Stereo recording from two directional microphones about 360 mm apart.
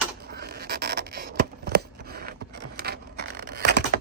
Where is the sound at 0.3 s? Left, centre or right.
Right.